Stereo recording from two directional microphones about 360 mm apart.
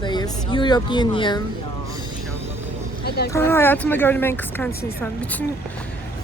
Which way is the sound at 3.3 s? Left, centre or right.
Centre.